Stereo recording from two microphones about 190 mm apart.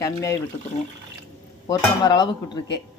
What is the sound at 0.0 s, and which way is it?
Speech, 15° left (ahead or behind).